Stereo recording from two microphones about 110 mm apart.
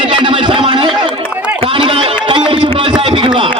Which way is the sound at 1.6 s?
55° right (ahead or behind).